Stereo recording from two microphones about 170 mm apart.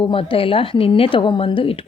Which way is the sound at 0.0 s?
30° left (ahead or behind).